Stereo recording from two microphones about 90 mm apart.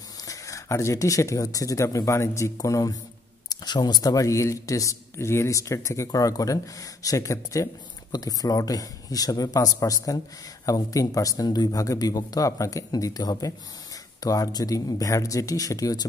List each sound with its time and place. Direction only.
0.2 s speech: 40° left (ahead or behind)